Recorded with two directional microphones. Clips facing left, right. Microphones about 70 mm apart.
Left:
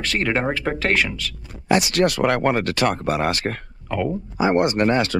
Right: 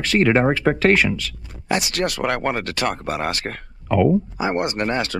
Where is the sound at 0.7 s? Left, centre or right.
Right.